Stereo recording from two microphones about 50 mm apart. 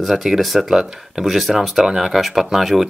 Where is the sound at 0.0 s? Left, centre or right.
Centre.